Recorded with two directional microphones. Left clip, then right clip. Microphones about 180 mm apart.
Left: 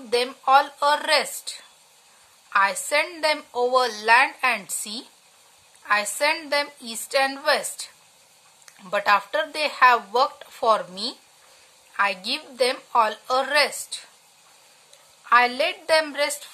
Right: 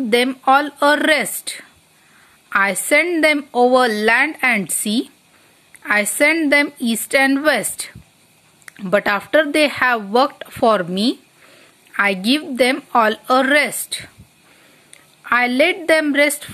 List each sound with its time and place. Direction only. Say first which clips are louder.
0.1 s a woman's voice: right 4 dB; 30° right (ahead or behind)
8.6 s speech: right 4 dB; 30° right (ahead or behind)
15.2 s speech: right 4 dB; 30° right (ahead or behind)